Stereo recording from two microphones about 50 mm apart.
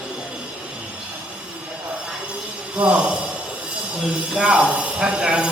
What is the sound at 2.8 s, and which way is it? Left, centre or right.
Speech, right.